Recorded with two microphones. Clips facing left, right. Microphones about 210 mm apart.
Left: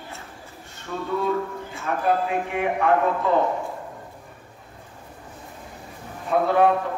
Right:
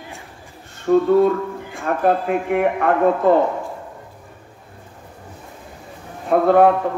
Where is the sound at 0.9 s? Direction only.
55° right (ahead or behind).